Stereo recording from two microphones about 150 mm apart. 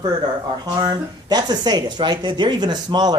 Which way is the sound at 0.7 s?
25° right (ahead or behind).